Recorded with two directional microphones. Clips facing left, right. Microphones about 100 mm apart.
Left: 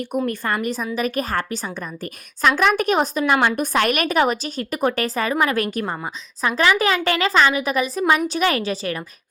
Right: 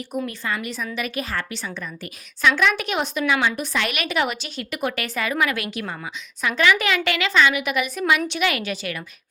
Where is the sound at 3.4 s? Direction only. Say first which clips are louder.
Left 5 dB; 50° left (ahead or behind).